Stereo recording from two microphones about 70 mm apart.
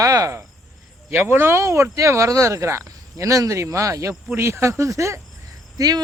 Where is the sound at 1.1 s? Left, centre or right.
Right.